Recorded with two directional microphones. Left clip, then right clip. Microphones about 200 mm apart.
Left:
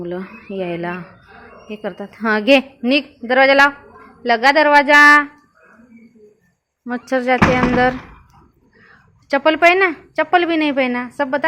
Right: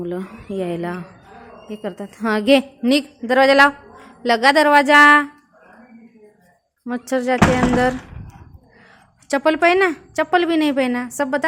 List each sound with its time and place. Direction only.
0.0 s a woman's voice: 20° right (ahead or behind)
6.8 s a woman's voice: 15° right (ahead or behind)